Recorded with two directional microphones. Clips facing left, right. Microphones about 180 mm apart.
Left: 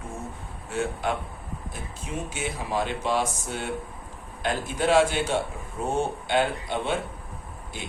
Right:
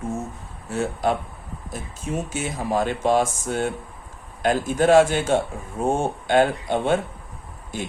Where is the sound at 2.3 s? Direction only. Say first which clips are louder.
Right 4 dB; 45° right (ahead or behind).